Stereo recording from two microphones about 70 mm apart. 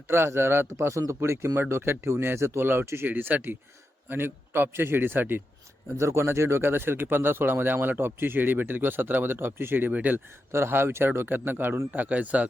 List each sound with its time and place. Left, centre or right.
0.1 s a man's voice: right
6.0 s speech: right
10.5 s a man's voice: right